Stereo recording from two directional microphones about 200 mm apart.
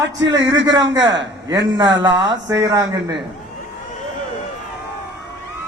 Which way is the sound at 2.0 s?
20° right (ahead or behind).